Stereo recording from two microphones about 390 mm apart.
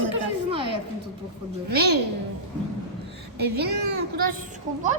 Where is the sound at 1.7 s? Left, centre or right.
Right.